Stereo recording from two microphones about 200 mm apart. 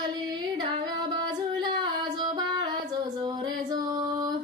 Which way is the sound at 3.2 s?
20° right (ahead or behind).